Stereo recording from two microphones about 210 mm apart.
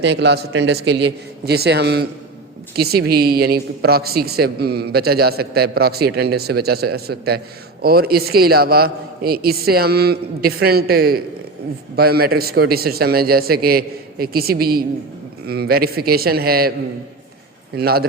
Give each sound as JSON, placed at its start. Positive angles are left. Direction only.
{"t": 0.0, "sound": "a man's voice", "side_deg": -55}
{"t": 17.7, "sound": "a woman's voice", "side_deg": -45}